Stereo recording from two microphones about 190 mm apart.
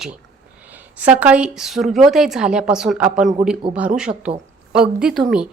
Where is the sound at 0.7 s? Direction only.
10° right (ahead or behind).